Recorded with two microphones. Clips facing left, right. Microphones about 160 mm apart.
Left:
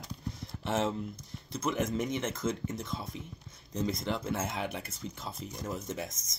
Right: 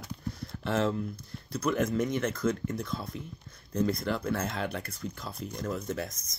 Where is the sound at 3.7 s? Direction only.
55° right (ahead or behind).